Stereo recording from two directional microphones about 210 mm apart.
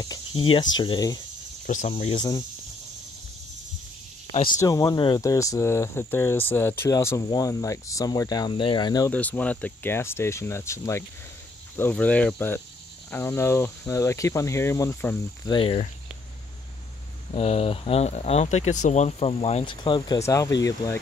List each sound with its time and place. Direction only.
0.0 s speech: 25° left (ahead or behind)
1.7 s speech: 35° left (ahead or behind)
4.6 s speech: 15° left (ahead or behind)
9.1 s speech: 5° left (ahead or behind)
15.5 s speech: 25° left (ahead or behind)
17.3 s speech: 30° left (ahead or behind)